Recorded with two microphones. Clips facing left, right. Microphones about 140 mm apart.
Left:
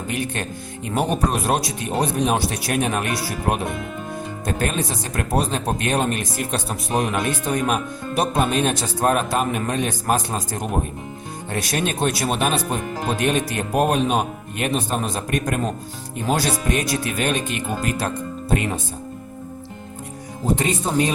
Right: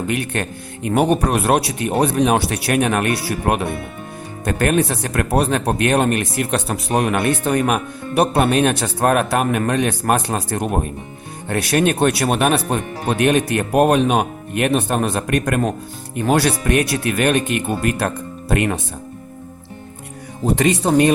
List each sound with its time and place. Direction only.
0.1 s speech: 65° right (ahead or behind)
20.6 s speech: 70° right (ahead or behind)